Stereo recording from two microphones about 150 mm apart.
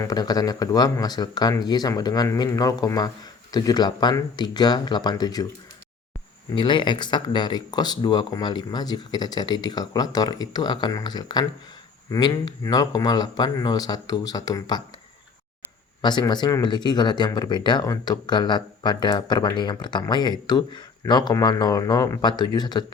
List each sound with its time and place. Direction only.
0.0 s speech: 25° left (ahead or behind)
6.5 s speech: 30° left (ahead or behind)
16.0 s speech: 30° left (ahead or behind)